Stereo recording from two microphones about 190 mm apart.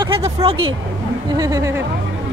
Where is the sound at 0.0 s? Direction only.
30° right (ahead or behind).